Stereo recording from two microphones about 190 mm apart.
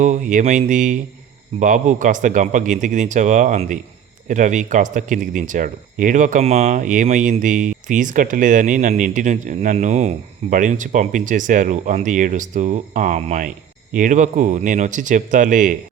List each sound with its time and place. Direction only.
0.0 s speech: 40° right (ahead or behind)